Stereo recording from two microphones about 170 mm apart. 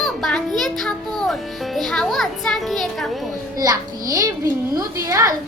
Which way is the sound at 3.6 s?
20° right (ahead or behind).